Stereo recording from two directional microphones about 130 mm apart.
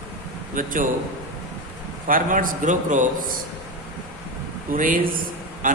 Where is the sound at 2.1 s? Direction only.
90° right.